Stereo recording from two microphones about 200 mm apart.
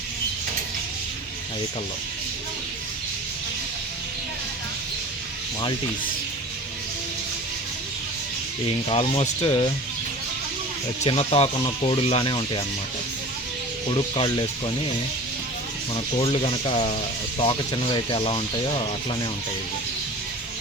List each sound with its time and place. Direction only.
8.6 s speech: 30° left (ahead or behind)
11.0 s speech: 30° left (ahead or behind)
13.9 s speech: 20° left (ahead or behind)
16.2 s speech: 30° left (ahead or behind)